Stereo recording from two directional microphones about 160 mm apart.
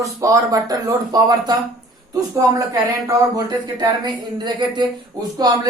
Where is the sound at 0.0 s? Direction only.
20° right (ahead or behind).